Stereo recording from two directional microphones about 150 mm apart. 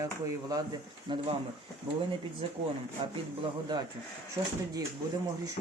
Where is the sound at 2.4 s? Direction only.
40° right (ahead or behind).